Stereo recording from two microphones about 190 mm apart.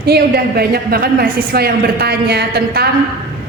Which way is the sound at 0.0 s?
55° right (ahead or behind).